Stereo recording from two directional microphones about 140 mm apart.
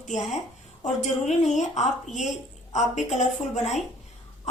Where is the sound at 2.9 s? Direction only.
55° left (ahead or behind).